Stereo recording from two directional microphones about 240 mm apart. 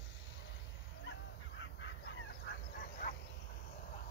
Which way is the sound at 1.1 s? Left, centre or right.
Left.